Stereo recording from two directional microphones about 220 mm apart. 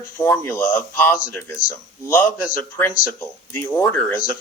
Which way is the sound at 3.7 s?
10° left (ahead or behind).